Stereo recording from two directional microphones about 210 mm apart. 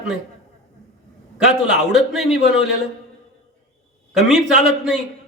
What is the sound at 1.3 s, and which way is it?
A man's voice, 5° right (ahead or behind).